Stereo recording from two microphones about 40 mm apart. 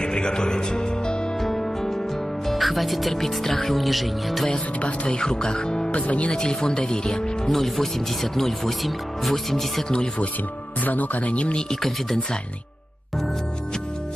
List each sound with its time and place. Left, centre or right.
0.0 s music: centre
1.4 s music: centre
2.4 s speech: centre
4.8 s speech: left
5.9 s speech: left
6.3 s speech: centre
7.4 s speech: centre
9.8 s speech: left
10.8 s speech: left
11.8 s speech: centre